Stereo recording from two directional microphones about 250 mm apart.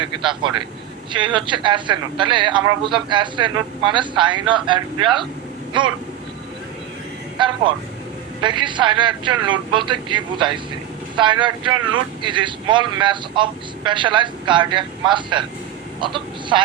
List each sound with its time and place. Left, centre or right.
0.0 s vehicle: centre
1.1 s speech: centre
7.3 s vehicle: centre
8.4 s a man's voice: centre